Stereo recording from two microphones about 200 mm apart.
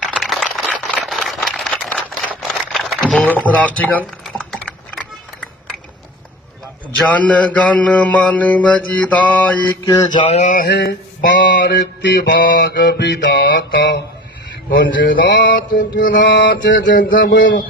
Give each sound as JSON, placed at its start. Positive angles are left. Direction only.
{"t": 0.1, "sound": "a sound", "side_deg": 0}
{"t": 7.0, "sound": "mantra", "side_deg": 5}
{"t": 10.4, "sound": "a sound", "side_deg": 40}
{"t": 10.7, "sound": "mantra", "side_deg": 55}
{"t": 15.5, "sound": "speech", "side_deg": 45}
{"t": 16.2, "sound": "mantra", "side_deg": 65}
{"t": 16.9, "sound": "speech", "side_deg": 45}